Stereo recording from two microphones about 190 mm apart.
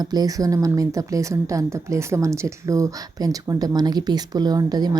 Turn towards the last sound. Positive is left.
turn(degrees=-20)  # may be behind; listen again after turning